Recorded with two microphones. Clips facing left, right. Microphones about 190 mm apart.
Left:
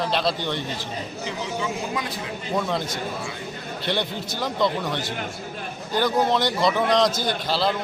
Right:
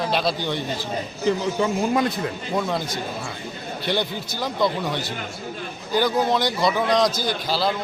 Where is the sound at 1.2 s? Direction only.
50° right (ahead or behind).